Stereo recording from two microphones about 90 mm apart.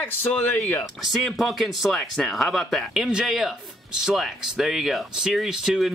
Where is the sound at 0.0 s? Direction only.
20° left (ahead or behind).